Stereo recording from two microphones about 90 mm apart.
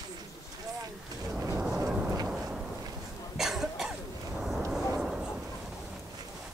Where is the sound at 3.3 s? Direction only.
5° right (ahead or behind).